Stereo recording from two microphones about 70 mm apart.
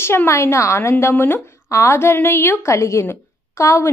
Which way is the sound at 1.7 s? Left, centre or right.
Left.